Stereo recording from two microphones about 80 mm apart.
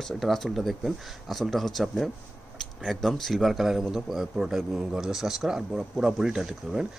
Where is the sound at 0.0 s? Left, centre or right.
Centre.